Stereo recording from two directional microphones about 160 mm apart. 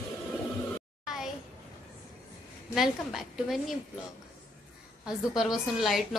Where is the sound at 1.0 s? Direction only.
Centre (ahead or behind).